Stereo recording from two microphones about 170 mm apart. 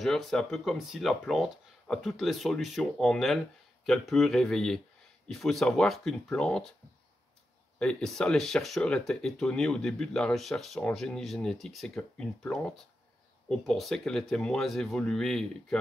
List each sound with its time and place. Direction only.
0.0 s speech: centre (ahead or behind)
7.8 s speech: 5° left (ahead or behind)